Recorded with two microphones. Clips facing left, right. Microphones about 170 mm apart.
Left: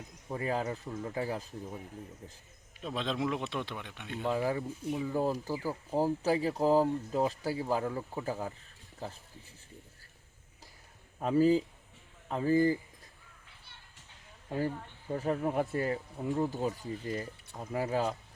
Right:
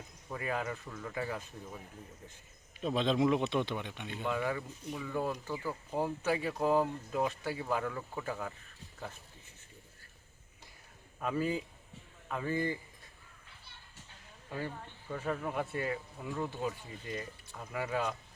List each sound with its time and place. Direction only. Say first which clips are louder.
0.3 s speech: left 3 dB; 30° left (ahead or behind)
2.8 s a man's voice: right 4 dB; centre (ahead or behind)
4.3 s speech: left 3 dB; 30° left (ahead or behind)
11.2 s speech: left 8 dB; 35° left (ahead or behind)
15.1 s speech: left 5 dB; 35° left (ahead or behind)